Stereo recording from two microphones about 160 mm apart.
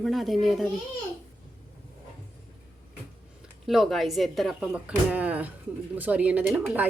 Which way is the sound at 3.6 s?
Centre (ahead or behind).